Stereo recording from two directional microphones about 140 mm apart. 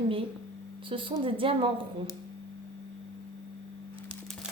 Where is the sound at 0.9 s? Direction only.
35° right (ahead or behind).